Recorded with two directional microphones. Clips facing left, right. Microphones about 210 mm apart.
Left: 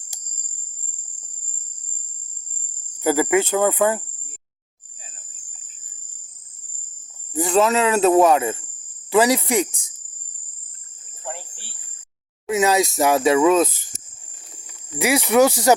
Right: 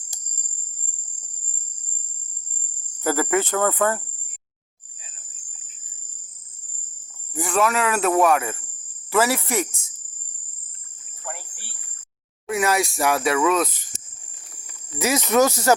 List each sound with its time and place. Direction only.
0.1 s cricket: 10° left (ahead or behind)
3.0 s speech: 15° left (ahead or behind)
7.3 s speech: 20° left (ahead or behind)
11.2 s cricket: 25° left (ahead or behind)
12.5 s speech: 20° left (ahead or behind)
14.7 s speech: 15° left (ahead or behind)